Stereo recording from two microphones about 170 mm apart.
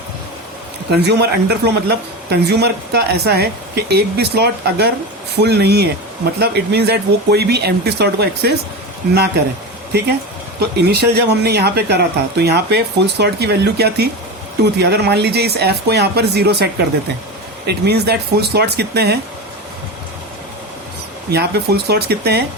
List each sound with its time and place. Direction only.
0.9 s a woman's voice: 75° right (ahead or behind)
10.8 s a woman's voice: 75° right (ahead or behind)
21.2 s a woman's voice: 70° right (ahead or behind)